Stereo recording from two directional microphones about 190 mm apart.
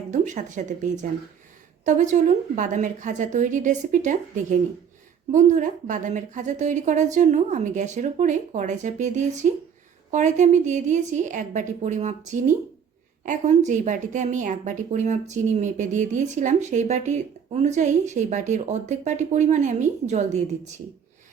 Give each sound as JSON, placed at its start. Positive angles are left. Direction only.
{"t": 0.1, "sound": "a woman's voice", "side_deg": -40}